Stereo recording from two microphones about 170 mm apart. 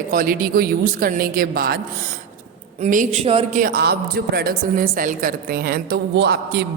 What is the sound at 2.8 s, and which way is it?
Speech, 45° right (ahead or behind).